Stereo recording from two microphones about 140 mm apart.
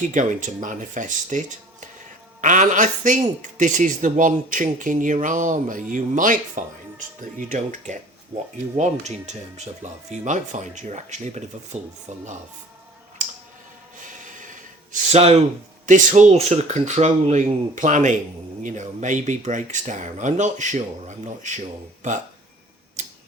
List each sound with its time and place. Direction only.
0.0 s speech: 65° right (ahead or behind)
14.0 s train: 65° right (ahead or behind)
15.1 s speech: 50° right (ahead or behind)
15.9 s speech: 60° right (ahead or behind)